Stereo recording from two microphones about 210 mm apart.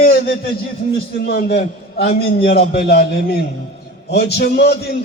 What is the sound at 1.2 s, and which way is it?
A man's voice, 50° left (ahead or behind).